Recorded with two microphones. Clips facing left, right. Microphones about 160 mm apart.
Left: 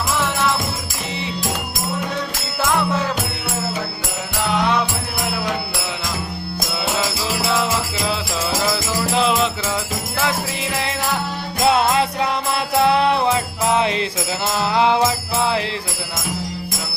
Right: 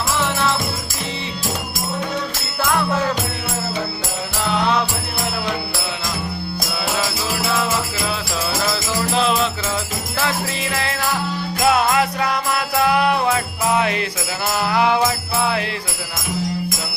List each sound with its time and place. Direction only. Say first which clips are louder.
7.4 s music: left 1 dB; 20° left (ahead or behind)
10.2 s jingle bell: even; 15° left (ahead or behind)
11.6 s music: even; 25° left (ahead or behind)
14.7 s jingle bell: left 1 dB; 25° left (ahead or behind)